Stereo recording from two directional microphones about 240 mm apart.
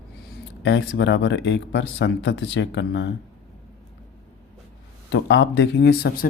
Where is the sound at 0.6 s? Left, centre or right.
Left.